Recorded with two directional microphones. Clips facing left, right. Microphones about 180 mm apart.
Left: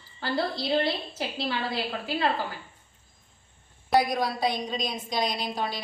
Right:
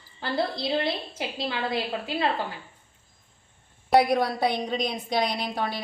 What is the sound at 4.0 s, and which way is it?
A woman's voice, 60° right (ahead or behind).